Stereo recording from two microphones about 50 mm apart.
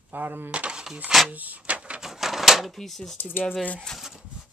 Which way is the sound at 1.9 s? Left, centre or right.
Centre.